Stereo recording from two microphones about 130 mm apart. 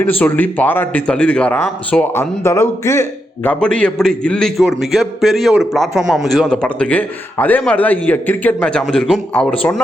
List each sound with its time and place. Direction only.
0.0 s speech: 15° left (ahead or behind)
3.5 s a man's voice: 10° left (ahead or behind)
9.3 s speech: 15° left (ahead or behind)